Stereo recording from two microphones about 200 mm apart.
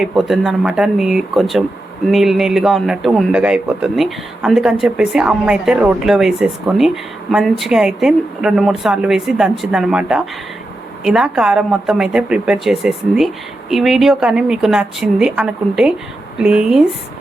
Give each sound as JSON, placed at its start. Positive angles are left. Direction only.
{"t": 0.0, "sound": "a man's voice", "side_deg": 0}